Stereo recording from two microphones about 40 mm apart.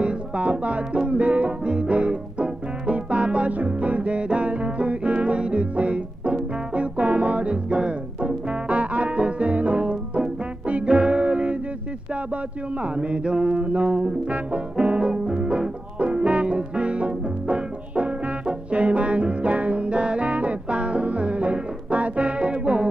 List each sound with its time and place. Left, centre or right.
0.0 s music: right
12.8 s music: right